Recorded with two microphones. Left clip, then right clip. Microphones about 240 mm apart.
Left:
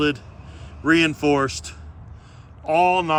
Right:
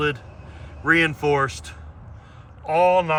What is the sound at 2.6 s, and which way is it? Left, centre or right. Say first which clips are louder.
Speech: even; centre.